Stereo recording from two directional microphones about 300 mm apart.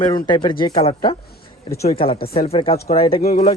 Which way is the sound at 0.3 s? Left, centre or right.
Centre.